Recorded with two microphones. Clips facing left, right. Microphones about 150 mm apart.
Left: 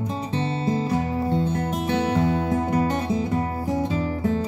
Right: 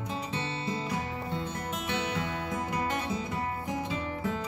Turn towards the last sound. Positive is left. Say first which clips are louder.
# left 9 dB
turn(degrees=35)  # may be behind; listen again after turning